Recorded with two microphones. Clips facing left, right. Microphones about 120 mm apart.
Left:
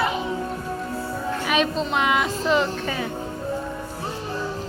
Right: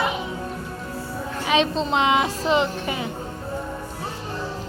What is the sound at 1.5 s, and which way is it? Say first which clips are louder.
A woman's voice: right 3 dB; 25° right (ahead or behind).